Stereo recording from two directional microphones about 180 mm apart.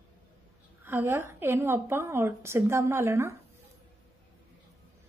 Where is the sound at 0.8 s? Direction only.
10° right (ahead or behind).